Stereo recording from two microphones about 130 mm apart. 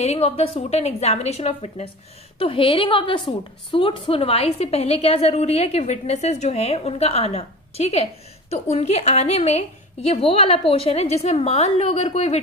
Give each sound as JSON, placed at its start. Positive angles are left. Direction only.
{"t": 0.0, "sound": "a woman's voice", "side_deg": 55}